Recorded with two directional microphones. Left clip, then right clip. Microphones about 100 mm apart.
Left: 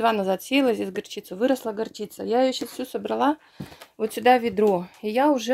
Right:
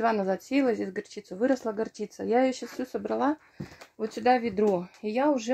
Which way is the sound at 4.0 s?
25° left (ahead or behind).